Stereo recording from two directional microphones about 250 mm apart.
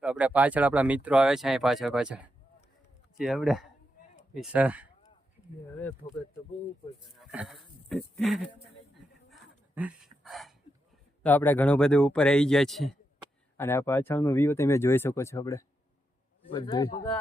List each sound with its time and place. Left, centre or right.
0.0 s speech: centre
6.0 s speech: left
7.2 s speech: centre
9.3 s a sound: centre
11.2 s speech: centre